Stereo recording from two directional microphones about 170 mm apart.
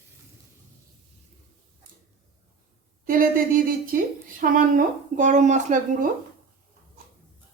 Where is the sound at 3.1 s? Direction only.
55° right (ahead or behind).